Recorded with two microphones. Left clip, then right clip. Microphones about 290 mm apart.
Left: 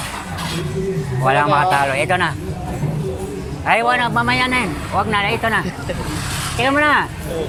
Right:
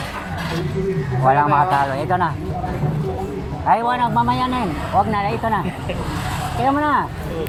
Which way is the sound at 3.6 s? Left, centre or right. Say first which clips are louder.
Left 1 dB; left.